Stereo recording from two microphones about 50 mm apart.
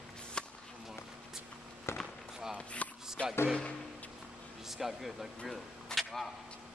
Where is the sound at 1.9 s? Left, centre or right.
Left.